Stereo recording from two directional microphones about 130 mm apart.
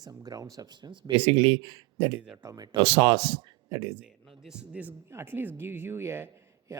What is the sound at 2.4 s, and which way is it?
Speech, 25° right (ahead or behind).